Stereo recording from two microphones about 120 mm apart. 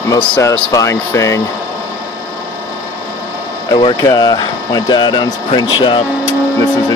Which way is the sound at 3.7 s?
40° left (ahead or behind).